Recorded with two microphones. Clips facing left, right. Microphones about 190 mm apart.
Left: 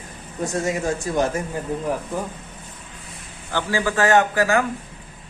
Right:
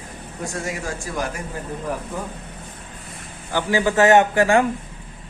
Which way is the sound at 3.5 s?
20° right (ahead or behind).